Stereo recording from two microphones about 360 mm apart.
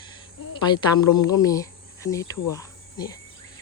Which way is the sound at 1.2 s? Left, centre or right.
Centre.